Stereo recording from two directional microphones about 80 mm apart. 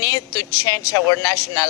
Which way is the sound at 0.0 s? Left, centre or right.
Left.